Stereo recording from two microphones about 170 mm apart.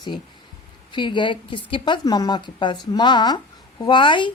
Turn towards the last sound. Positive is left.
turn(degrees=30)  # may be behind; listen again after turning